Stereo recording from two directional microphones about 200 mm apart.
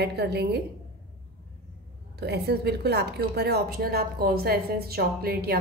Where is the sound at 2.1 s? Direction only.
55° right (ahead or behind).